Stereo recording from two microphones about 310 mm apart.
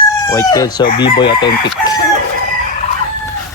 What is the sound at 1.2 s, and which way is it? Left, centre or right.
Speech, centre.